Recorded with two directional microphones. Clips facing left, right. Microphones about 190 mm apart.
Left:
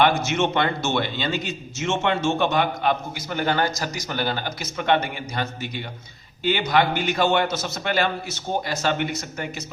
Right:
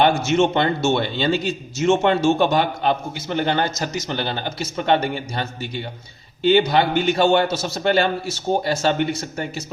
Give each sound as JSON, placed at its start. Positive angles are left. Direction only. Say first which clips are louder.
{"t": 0.0, "sound": "a man's voice", "louder": "right 3 dB", "side_deg": -25}
{"t": 6.6, "sound": "a man's voice", "louder": "right 3 dB", "side_deg": -30}